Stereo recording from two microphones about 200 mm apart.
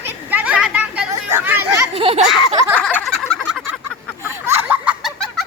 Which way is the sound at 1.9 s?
30° right (ahead or behind).